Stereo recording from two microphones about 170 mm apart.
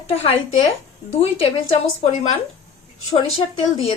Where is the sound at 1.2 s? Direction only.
35° left (ahead or behind).